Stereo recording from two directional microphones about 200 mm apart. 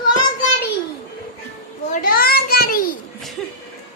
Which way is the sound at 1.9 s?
45° left (ahead or behind).